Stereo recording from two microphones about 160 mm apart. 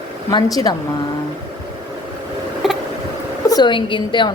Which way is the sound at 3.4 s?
25° left (ahead or behind).